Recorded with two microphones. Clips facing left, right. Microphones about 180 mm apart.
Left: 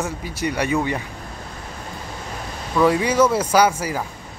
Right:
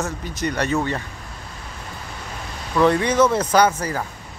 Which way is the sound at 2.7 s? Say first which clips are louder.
Even; 5° left (ahead or behind).